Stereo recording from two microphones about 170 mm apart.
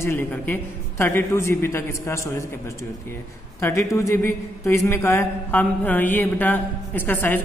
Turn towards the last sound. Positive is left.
turn(degrees=10)  # may be behind; listen again after turning